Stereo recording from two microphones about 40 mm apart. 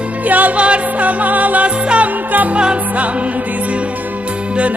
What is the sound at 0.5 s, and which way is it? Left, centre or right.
Music, right.